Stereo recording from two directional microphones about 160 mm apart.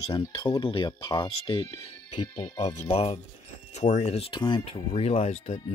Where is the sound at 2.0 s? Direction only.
45° left (ahead or behind).